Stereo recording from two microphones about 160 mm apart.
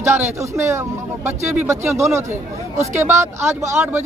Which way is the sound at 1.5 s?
15° right (ahead or behind).